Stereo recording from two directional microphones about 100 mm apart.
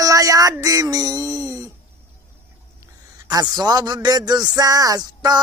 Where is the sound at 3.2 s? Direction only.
40° right (ahead or behind).